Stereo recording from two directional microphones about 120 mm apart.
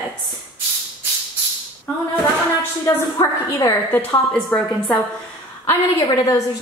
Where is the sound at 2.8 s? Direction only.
25° left (ahead or behind).